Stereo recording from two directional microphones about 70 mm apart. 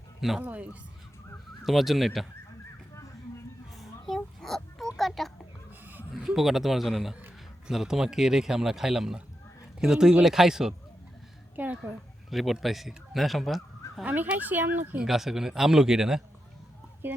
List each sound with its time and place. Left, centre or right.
0.2 s speech: centre
0.4 s speech: right
1.6 s a man's voice: centre
3.8 s a sound: centre
5.8 s a sound: right
6.1 s a man's voice: centre
11.5 s a child's voice: right
12.3 s speech: centre
14.0 s speech: right
15.0 s a man's voice: centre